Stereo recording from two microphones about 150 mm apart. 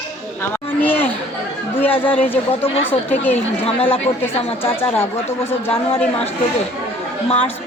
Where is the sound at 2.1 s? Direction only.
15° left (ahead or behind).